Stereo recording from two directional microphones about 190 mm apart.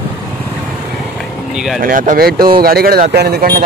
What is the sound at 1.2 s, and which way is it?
Vehicle, centre (ahead or behind).